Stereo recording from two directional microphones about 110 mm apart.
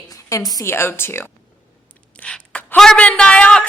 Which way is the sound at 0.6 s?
20° left (ahead or behind).